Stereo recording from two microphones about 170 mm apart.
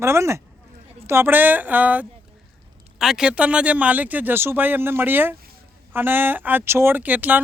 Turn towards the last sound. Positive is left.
turn(degrees=-10)  # may be behind; listen again after turning